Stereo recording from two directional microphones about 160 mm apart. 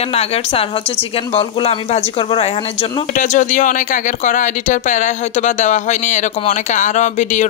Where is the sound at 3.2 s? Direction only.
50° left (ahead or behind).